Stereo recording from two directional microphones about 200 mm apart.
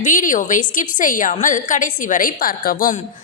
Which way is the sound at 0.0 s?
40° left (ahead or behind).